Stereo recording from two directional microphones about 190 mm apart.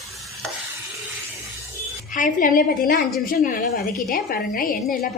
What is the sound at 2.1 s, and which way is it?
A woman's voice, 45° left (ahead or behind).